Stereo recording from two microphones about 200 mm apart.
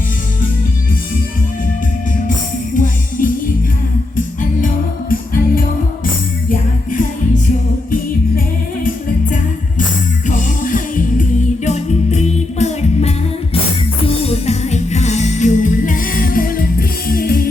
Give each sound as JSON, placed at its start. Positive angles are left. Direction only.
{"t": 2.7, "sound": "music", "side_deg": 40}
{"t": 4.6, "sound": "music", "side_deg": 45}
{"t": 10.2, "sound": "music", "side_deg": 40}